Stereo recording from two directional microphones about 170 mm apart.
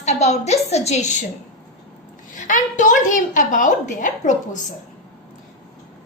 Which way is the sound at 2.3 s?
50° left (ahead or behind).